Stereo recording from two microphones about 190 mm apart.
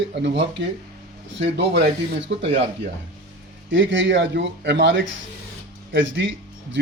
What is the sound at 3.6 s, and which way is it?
Speech, 85° right.